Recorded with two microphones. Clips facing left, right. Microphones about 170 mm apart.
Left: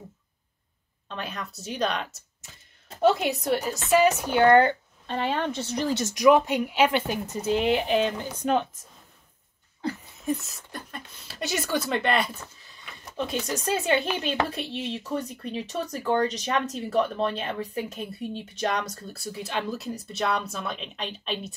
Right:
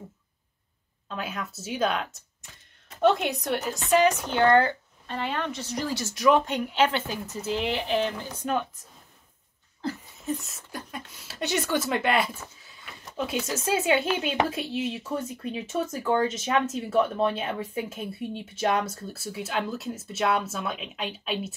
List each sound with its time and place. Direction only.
1.0 s speech: 5° right (ahead or behind); by 8.6 s 20° left (ahead or behind)
10.4 s speech: 5° right (ahead or behind)